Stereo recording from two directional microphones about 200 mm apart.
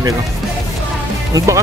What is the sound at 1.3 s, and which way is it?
Speech, 15° right (ahead or behind).